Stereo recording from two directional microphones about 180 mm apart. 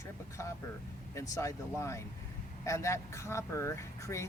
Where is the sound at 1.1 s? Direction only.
15° left (ahead or behind).